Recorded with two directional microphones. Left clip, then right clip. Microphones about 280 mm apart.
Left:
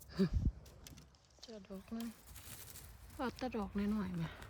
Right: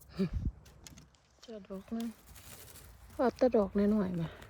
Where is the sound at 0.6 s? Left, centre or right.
Right.